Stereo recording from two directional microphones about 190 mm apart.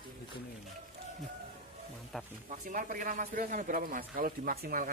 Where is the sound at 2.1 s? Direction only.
Centre (ahead or behind).